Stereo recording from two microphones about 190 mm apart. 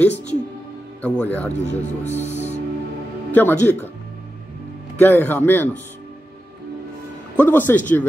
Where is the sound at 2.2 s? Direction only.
35° left (ahead or behind).